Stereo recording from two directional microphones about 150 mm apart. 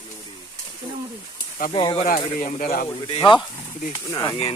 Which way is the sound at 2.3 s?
65° left (ahead or behind).